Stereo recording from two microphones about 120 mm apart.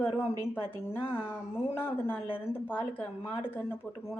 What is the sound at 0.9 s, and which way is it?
Speech, 15° left (ahead or behind).